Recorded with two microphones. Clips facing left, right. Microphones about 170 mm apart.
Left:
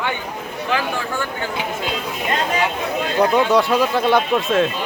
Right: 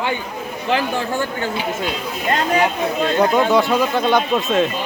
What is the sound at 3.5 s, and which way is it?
Speech, centre (ahead or behind).